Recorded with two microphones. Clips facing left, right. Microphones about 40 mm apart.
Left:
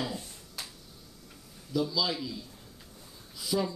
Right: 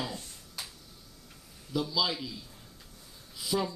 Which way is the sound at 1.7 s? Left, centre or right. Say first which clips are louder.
Left 2 dB; right.